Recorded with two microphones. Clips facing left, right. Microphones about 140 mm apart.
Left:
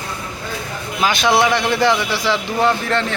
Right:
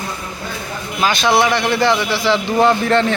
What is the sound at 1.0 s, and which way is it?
A man's voice, 15° left (ahead or behind).